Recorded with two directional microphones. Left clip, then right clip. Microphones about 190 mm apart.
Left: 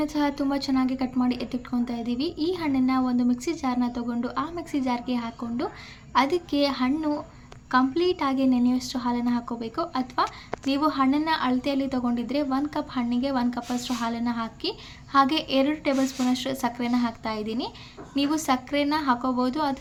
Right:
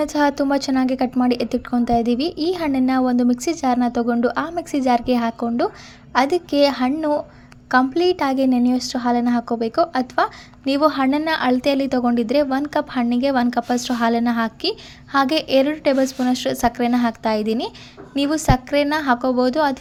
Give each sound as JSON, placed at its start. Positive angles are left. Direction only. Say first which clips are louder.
{"t": 0.0, "sound": "a woman's voice", "louder": "right 8 dB", "side_deg": -40}